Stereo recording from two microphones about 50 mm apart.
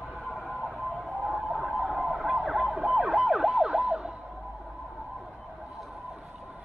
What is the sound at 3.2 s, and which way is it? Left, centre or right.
Emergency vehicle, centre.